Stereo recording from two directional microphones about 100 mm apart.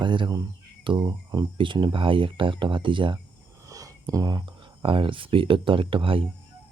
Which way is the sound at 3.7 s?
35° right (ahead or behind).